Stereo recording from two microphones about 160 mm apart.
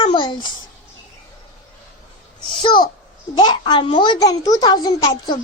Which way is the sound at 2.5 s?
30° left (ahead or behind).